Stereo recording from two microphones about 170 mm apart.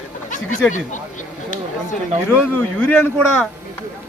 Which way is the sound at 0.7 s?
45° left (ahead or behind).